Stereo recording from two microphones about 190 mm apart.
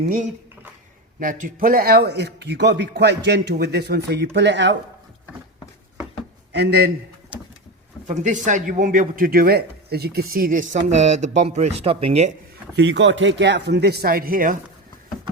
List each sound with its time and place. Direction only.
1.2 s a man's voice: 45° right (ahead or behind); by 4.8 s 70° right (ahead or behind)
6.5 s a man's voice: 60° right (ahead or behind)
8.0 s speech: 40° right (ahead or behind)
12.7 s a man's voice: 70° right (ahead or behind); by 14.6 s 45° right (ahead or behind)